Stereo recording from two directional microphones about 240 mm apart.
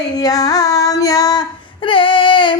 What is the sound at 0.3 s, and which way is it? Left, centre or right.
Female singing, centre.